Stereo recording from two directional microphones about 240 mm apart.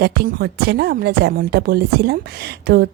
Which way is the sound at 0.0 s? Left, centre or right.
Right.